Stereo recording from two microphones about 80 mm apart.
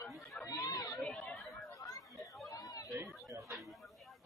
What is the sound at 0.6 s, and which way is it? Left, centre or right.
Chatter, left.